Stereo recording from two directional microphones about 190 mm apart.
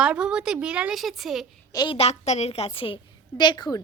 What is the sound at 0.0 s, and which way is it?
A woman's voice, 5° right (ahead or behind).